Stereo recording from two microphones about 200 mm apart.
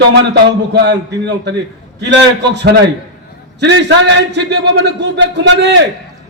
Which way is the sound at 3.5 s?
60° right (ahead or behind).